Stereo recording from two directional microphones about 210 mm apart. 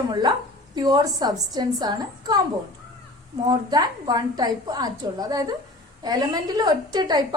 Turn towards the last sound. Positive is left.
turn(degrees=-20)  # may be behind; listen again after turning